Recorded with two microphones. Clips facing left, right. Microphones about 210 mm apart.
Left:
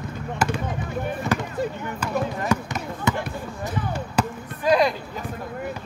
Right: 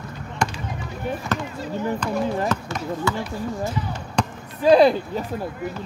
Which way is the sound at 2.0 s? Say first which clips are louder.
Right 3 dB; 10° left (ahead or behind).